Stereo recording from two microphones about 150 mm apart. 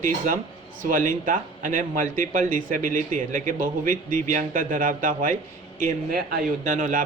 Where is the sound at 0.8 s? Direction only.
60° right (ahead or behind).